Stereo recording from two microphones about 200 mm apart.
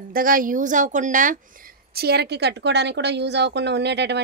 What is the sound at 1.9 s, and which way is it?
A woman's voice, 50° right (ahead or behind).